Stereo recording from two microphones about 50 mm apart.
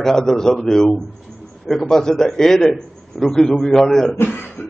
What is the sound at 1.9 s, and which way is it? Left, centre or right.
A man's voice, centre.